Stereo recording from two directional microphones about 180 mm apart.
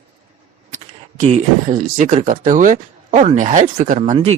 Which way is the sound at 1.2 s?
40° right (ahead or behind).